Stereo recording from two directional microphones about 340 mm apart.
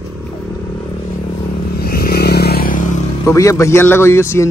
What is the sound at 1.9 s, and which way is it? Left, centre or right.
Vehicle, left.